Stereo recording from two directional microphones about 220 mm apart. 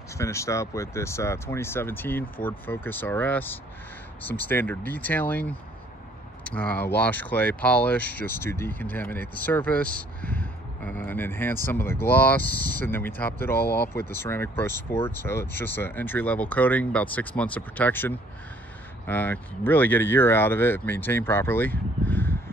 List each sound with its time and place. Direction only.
0.2 s speech: 15° left (ahead or behind)
13.6 s speech: 45° left (ahead or behind)
14.1 s speech: 10° left (ahead or behind)